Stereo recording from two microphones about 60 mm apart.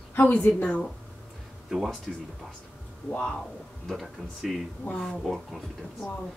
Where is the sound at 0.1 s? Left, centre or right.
Left.